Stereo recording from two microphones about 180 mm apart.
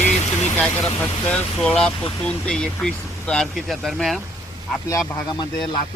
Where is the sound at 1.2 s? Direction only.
5° left (ahead or behind).